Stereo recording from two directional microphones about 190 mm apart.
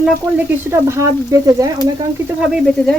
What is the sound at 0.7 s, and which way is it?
Speech, 15° right (ahead or behind).